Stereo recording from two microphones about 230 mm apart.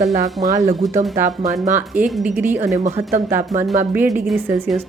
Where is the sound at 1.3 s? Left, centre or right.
Right.